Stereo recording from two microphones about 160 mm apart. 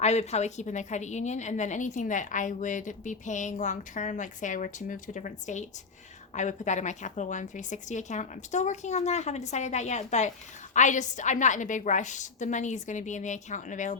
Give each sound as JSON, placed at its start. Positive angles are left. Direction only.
{"t": 0.0, "sound": "a woman's voice", "side_deg": 45}